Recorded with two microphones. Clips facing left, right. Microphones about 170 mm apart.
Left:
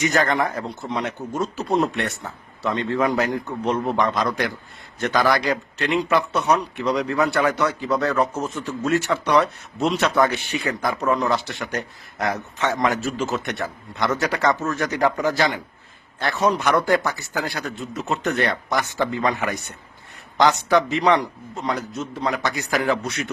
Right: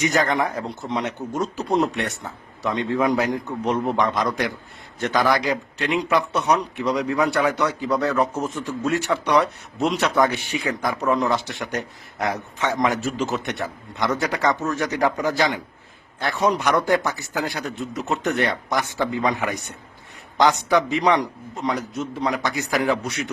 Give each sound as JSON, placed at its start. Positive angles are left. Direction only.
{"t": 0.0, "sound": "speech", "side_deg": -10}
{"t": 2.6, "sound": "speech", "side_deg": -15}
{"t": 11.0, "sound": "a man's voice", "side_deg": 0}
{"t": 11.6, "sound": "a man's voice", "side_deg": -20}
{"t": 16.8, "sound": "speech", "side_deg": -15}